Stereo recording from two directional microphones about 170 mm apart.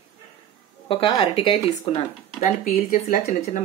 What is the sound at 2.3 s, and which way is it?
Speech, 50° left (ahead or behind).